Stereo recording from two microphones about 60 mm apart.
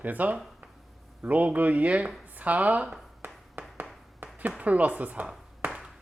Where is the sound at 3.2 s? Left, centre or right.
Right.